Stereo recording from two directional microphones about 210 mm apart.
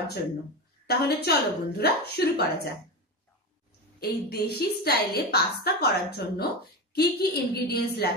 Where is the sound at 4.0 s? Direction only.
50° left (ahead or behind).